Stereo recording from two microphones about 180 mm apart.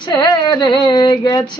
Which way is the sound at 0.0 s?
25° left (ahead or behind).